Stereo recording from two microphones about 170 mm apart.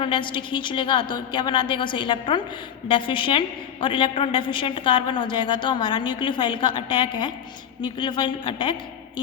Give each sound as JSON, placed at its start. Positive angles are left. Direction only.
{"t": 0.0, "sound": "a woman's voice", "side_deg": 30}